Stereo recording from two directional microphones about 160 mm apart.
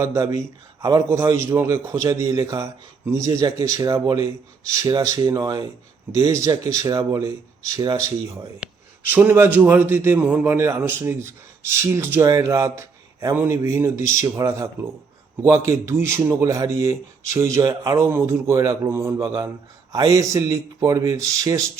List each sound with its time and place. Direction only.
0.0 s a man's voice: 20° right (ahead or behind)